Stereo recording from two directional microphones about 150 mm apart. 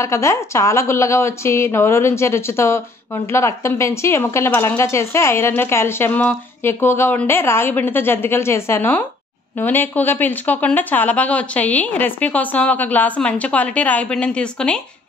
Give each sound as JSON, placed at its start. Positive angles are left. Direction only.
{"t": 0.0, "sound": "a woman's voice", "side_deg": 20}